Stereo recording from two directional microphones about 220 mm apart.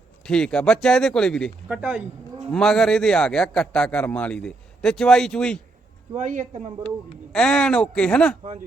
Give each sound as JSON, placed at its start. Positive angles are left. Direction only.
{"t": 0.3, "sound": "a man's voice", "side_deg": 5}
{"t": 6.1, "sound": "speech", "side_deg": -35}
{"t": 7.3, "sound": "a man's voice", "side_deg": 5}